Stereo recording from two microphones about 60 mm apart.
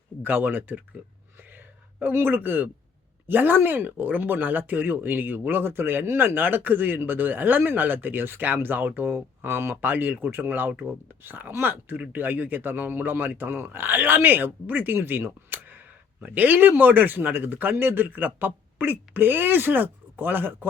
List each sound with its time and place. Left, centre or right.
0.2 s speech: right
1.4 s a sound: right
3.2 s speech: right